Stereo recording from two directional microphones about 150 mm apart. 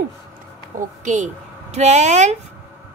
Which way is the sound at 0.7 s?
55° right (ahead or behind).